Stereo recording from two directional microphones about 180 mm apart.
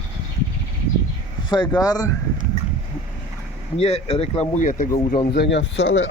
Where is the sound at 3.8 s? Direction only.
35° left (ahead or behind).